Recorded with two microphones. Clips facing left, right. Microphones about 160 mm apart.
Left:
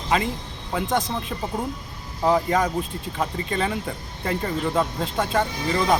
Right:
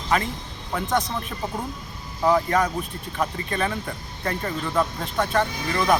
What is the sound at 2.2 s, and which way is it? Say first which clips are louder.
Speech: even; 20° left (ahead or behind).